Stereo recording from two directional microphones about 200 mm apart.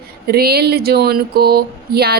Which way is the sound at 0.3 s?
50° right (ahead or behind).